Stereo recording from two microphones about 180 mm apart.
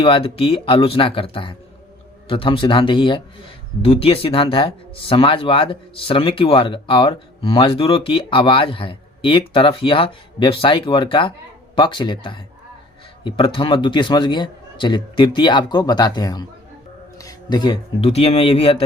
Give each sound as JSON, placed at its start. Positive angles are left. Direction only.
{"t": 0.0, "sound": "a man's voice", "side_deg": 30}